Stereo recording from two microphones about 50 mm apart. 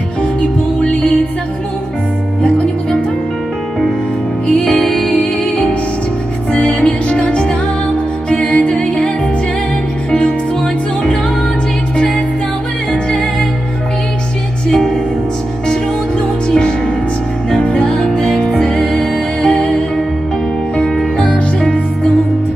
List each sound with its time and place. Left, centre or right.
0.8 s music: left
4.5 s music: centre
5.2 s music: left
14.7 s music: centre
16.4 s music: centre